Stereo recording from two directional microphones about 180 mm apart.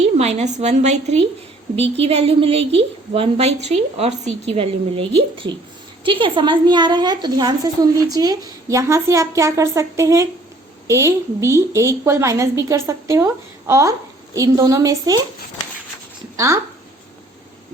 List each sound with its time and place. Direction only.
0.0 s a woman's voice: 40° right (ahead or behind); by 15.2 s 20° right (ahead or behind)